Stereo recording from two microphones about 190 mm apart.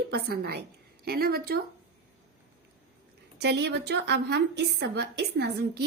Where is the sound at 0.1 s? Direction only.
55° right (ahead or behind).